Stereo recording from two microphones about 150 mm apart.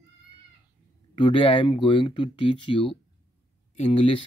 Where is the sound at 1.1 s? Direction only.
35° left (ahead or behind).